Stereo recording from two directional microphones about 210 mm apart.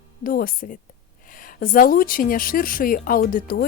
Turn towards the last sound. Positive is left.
turn(degrees=45)  # may be behind; listen again after turning